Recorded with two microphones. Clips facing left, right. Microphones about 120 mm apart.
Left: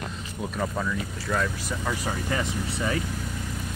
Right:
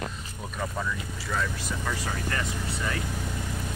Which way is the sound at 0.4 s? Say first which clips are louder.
Left 4 dB; 5° left (ahead or behind).